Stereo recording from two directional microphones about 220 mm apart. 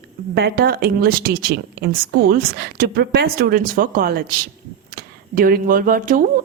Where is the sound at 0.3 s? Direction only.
45° right (ahead or behind).